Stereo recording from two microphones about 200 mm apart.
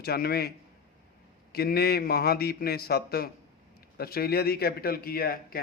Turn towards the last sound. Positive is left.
turn(degrees=50)  # may be behind; listen again after turning